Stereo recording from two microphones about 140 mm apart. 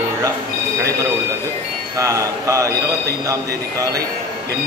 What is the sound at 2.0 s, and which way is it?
Speech, 20° right (ahead or behind).